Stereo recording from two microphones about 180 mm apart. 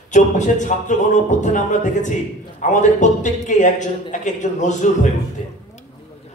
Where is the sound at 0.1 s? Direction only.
40° left (ahead or behind).